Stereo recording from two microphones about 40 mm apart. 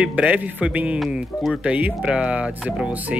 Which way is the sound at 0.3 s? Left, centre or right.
Right.